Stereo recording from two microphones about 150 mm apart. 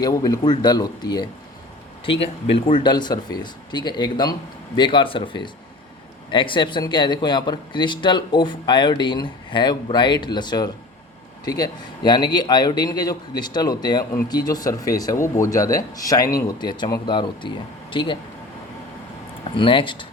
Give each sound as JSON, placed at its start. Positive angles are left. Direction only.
{"t": 0.0, "sound": "a man's voice", "side_deg": 25}
{"t": 2.0, "sound": "a man's voice", "side_deg": 40}
{"t": 19.5, "sound": "speech", "side_deg": 35}